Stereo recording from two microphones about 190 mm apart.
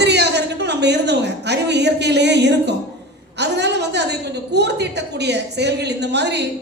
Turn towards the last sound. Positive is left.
turn(degrees=-60)  # may be behind; listen again after turning